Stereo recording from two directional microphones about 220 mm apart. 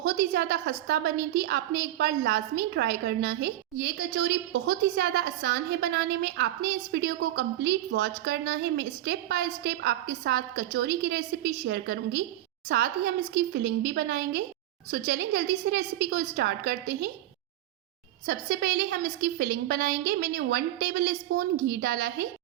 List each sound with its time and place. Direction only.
0.0 s a woman's voice: 45° right (ahead or behind)
18.3 s a woman's voice: 45° right (ahead or behind)